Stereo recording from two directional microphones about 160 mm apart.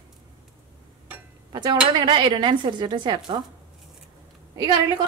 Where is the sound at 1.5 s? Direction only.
30° right (ahead or behind).